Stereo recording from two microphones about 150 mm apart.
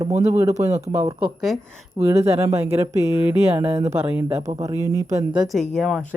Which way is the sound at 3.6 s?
40° right (ahead or behind).